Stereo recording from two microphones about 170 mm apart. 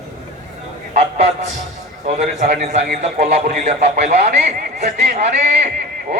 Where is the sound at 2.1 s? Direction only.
40° right (ahead or behind).